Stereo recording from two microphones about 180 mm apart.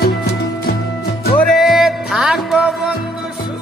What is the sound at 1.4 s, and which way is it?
Music, centre (ahead or behind).